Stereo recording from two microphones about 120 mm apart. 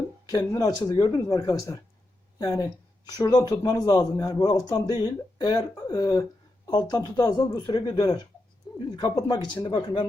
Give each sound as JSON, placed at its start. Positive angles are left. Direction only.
{"t": 0.3, "sound": "speech", "side_deg": 30}